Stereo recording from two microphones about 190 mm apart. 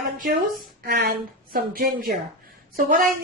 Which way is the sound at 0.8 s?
55° right (ahead or behind).